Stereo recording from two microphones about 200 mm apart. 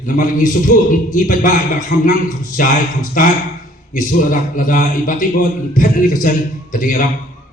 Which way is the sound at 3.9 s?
40° left (ahead or behind).